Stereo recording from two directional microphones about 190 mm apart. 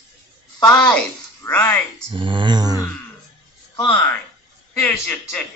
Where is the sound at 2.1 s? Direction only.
25° right (ahead or behind).